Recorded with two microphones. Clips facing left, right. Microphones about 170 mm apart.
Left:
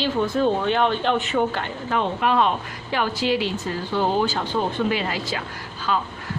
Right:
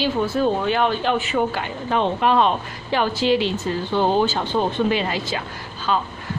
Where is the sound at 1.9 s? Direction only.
30° right (ahead or behind).